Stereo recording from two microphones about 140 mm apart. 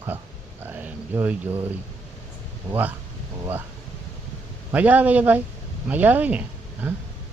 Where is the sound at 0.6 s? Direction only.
10° right (ahead or behind).